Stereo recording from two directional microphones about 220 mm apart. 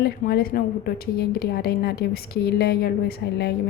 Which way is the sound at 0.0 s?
45° left (ahead or behind).